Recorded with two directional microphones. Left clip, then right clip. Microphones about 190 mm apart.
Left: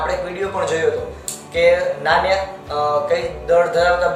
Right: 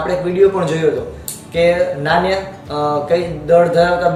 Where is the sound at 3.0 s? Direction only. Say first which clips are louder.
Right 3 dB; 10° left (ahead or behind).